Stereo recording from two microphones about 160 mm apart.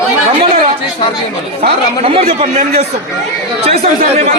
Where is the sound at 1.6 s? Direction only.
35° right (ahead or behind).